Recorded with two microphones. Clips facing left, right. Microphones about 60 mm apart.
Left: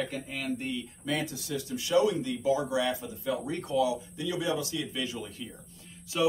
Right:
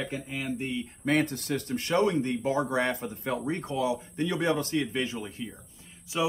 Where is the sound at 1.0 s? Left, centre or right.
Right.